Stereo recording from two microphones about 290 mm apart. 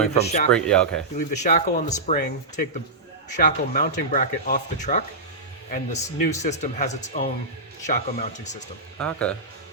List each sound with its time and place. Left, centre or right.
0.2 s speech: left
0.5 s speech: centre
1.3 s speech: left
9.0 s speech: centre